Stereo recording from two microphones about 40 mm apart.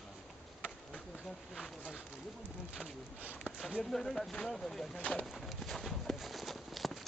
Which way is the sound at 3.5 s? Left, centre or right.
Right.